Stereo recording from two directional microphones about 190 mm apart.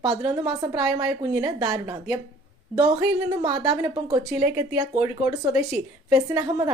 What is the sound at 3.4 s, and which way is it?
A woman's voice, 25° right (ahead or behind).